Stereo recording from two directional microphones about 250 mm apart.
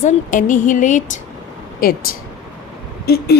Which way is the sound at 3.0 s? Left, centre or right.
Left.